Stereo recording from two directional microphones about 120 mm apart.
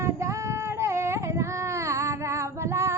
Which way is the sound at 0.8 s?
20° right (ahead or behind).